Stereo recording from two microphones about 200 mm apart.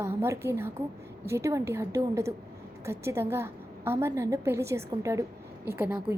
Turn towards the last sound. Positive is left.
turn(degrees=-5)  # may be behind; listen again after turning